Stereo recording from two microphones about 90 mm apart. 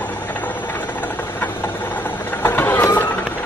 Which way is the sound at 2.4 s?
25° left (ahead or behind).